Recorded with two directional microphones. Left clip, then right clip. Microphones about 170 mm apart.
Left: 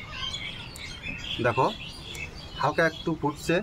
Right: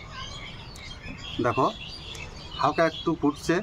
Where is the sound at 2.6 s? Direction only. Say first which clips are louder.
Right 1 dB; 30° right (ahead or behind).